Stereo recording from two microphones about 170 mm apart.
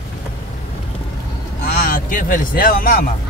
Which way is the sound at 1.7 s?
60° left (ahead or behind).